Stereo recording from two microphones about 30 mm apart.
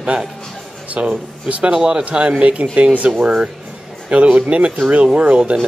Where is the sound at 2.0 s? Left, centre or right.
Right.